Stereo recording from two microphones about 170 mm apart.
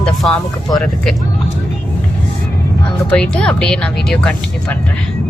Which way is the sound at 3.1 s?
5° left (ahead or behind).